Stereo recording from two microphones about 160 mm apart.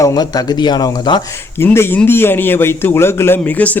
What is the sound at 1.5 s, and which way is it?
A man's voice, 15° left (ahead or behind).